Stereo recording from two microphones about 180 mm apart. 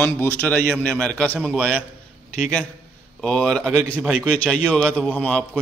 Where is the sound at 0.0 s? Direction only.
10° left (ahead or behind).